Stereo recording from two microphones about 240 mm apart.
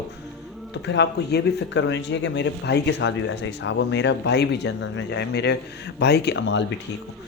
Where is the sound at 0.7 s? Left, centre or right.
Left.